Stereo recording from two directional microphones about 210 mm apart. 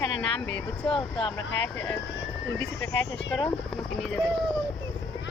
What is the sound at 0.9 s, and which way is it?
Speech, 25° left (ahead or behind).